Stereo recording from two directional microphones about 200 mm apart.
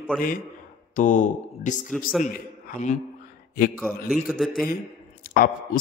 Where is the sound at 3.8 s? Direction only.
5° right (ahead or behind).